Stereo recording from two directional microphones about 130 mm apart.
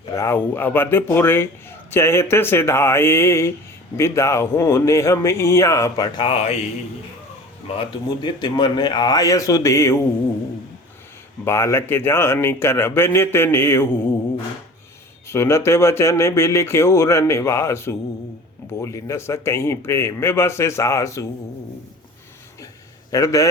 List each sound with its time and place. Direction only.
0.1 s a man's voice: 25° left (ahead or behind)
6.1 s speech: 45° left (ahead or behind)
7.8 s a man's voice: 35° left (ahead or behind)
11.4 s speech: 20° left (ahead or behind)
15.3 s speech: 20° left (ahead or behind)
23.1 s speech: 25° left (ahead or behind)